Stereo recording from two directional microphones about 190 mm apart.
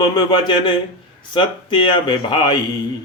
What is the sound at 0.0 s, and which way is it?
Speech, 25° left (ahead or behind).